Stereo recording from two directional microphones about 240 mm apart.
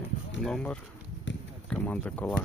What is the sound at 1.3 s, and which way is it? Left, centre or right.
Run, left.